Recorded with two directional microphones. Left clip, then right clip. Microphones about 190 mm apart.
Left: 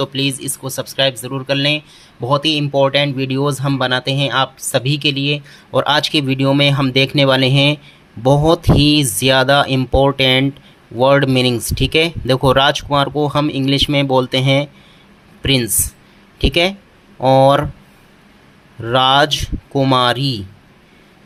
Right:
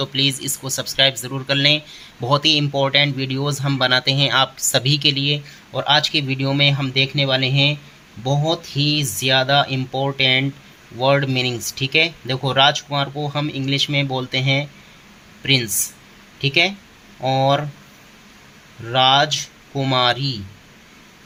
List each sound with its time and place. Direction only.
0.0 s speech: 20° left (ahead or behind)
18.9 s speech: 30° left (ahead or behind)